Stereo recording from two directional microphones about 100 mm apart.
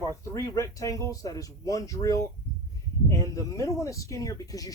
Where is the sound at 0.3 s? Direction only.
30° left (ahead or behind).